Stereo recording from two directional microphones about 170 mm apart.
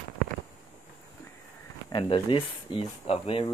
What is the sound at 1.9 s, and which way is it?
Speech, 30° left (ahead or behind).